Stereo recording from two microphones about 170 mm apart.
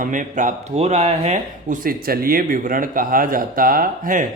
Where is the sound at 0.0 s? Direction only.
50° right (ahead or behind).